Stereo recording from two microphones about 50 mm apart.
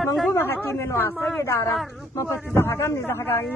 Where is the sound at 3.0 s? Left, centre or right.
Left.